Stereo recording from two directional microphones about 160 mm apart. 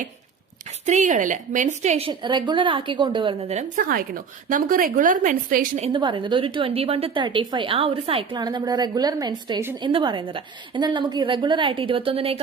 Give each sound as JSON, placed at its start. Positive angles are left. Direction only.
{"t": 0.9, "sound": "a woman's voice", "side_deg": -50}
{"t": 3.5, "sound": "a woman's voice", "side_deg": -50}
{"t": 5.7, "sound": "a woman's voice", "side_deg": -40}
{"t": 6.0, "sound": "a woman's voice", "side_deg": -30}